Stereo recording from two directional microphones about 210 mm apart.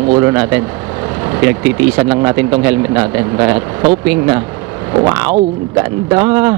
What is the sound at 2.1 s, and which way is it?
Speech, 15° right (ahead or behind).